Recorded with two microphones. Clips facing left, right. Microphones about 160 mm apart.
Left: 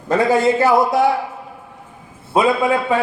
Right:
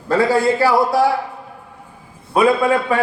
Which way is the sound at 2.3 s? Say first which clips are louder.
Right 1 dB; 20° left (ahead or behind).